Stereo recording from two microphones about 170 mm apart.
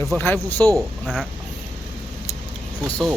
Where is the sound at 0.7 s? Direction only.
5° right (ahead or behind).